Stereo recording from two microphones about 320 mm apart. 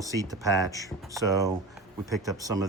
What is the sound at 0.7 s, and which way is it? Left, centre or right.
Speech, centre.